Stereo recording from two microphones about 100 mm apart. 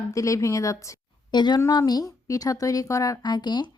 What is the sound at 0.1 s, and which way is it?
Speech, 30° left (ahead or behind).